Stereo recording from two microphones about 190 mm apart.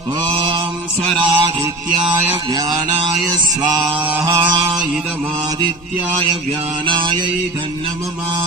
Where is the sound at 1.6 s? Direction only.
15° right (ahead or behind).